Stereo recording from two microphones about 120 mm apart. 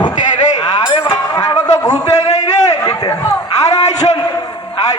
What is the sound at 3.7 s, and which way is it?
Speech, 70° left (ahead or behind).